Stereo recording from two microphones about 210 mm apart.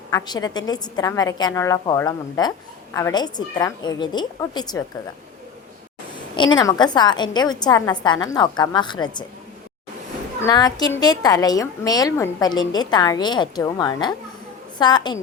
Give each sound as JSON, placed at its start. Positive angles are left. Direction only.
{"t": 0.1, "sound": "a woman's voice", "side_deg": 20}
{"t": 6.3, "sound": "a woman's voice", "side_deg": 20}
{"t": 10.4, "sound": "a woman's voice", "side_deg": 20}